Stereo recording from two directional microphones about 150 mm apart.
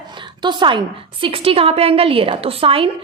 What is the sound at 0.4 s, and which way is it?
A woman's voice, 30° right (ahead or behind).